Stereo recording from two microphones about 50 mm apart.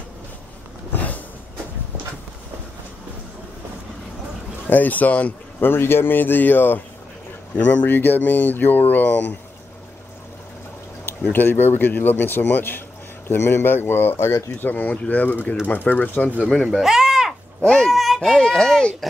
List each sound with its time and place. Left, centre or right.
0.9 s a sound: left
4.6 s speech: left
5.6 s speech: left
7.5 s speech: left
11.3 s speech: left
13.3 s speech: left
14.5 s speech: left
16.8 s a sound: centre
17.3 s a sound: centre
18.3 s a child's voice: centre